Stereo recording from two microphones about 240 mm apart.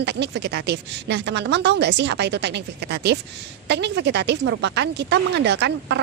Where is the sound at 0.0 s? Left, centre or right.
Right.